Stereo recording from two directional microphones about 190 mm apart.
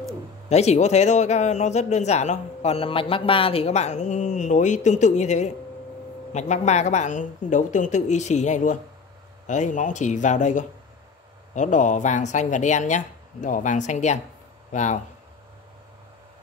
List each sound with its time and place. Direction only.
0.5 s a man's voice: 35° left (ahead or behind)